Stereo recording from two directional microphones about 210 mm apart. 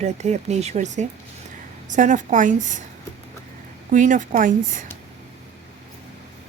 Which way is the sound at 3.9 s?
35° right (ahead or behind).